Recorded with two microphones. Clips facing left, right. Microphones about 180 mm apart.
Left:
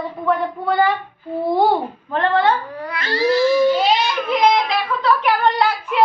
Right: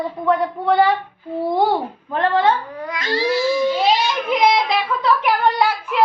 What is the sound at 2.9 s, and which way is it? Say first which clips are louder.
Cat: left 2 dB; 15° right (ahead or behind).